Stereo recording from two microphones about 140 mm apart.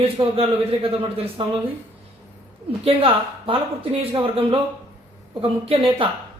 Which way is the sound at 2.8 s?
40° right (ahead or behind).